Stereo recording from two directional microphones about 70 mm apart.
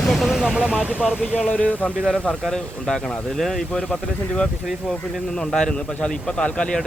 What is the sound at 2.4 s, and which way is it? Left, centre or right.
A man's voice, centre.